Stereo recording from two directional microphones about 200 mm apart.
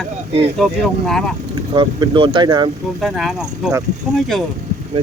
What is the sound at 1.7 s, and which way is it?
Speech, 25° right (ahead or behind).